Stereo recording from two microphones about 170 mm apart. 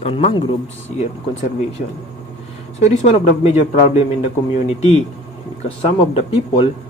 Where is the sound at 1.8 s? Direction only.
50° left (ahead or behind).